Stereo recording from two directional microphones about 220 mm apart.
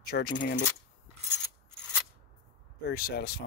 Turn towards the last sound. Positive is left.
turn(degrees=45)  # may be behind; listen again after turning